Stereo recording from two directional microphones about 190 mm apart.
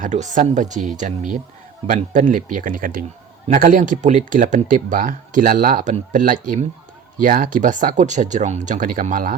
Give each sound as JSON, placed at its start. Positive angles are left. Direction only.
{"t": 0.0, "sound": "speech", "side_deg": -40}